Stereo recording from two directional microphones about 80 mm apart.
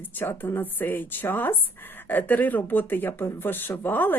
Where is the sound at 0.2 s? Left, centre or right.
Left.